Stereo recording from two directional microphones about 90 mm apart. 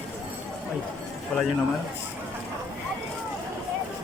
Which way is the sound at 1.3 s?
10° left (ahead or behind).